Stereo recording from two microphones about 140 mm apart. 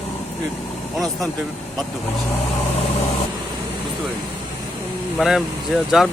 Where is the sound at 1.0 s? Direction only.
Centre (ahead or behind).